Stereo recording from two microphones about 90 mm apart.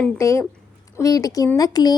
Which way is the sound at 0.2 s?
35° left (ahead or behind).